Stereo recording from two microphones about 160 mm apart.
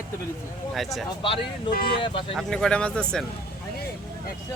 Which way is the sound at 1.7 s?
30° left (ahead or behind).